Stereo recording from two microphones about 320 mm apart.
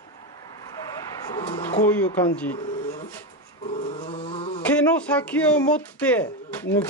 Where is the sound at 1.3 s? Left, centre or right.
Centre.